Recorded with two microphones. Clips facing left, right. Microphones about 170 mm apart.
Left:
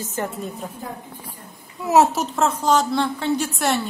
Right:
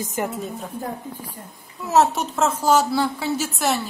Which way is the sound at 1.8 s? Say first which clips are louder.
Left 2 dB; 10° left (ahead or behind).